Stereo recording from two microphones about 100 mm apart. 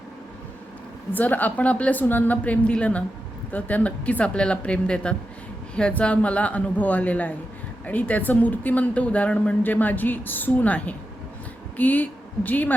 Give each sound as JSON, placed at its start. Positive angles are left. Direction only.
{"t": 1.1, "sound": "speech", "side_deg": 20}